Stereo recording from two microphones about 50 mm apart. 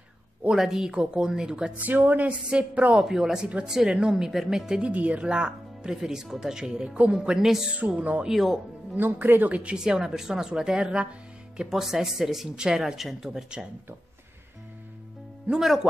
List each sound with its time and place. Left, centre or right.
0.5 s speech: centre
1.8 s speech: right
3.0 s speech: centre
4.8 s speech: right; by 7.5 s centre
7.8 s speech: right
8.3 s speech: centre
8.9 s speech: right
9.8 s speech: centre
15.5 s speech: centre